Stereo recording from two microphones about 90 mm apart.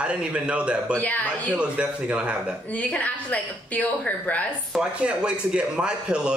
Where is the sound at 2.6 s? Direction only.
15° left (ahead or behind).